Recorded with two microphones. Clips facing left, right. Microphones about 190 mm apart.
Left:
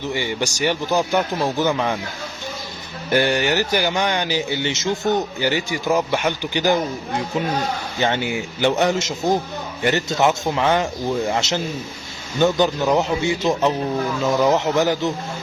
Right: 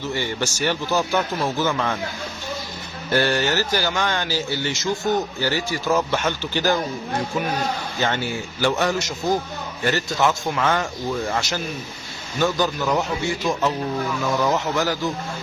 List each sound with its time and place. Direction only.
0.0 s speech: 15° left (ahead or behind)
3.1 s speech: 15° left (ahead or behind)